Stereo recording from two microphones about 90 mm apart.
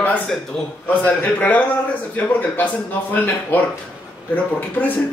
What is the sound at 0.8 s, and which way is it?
A man's voice, 20° left (ahead or behind).